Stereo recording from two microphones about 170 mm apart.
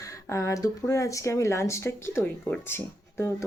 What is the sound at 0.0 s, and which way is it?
Speech, 20° left (ahead or behind).